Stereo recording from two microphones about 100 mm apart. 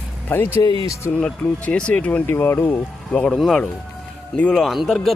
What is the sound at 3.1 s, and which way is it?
Speech, 10° left (ahead or behind).